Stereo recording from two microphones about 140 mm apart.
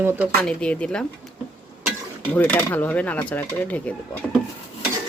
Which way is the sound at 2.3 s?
10° left (ahead or behind).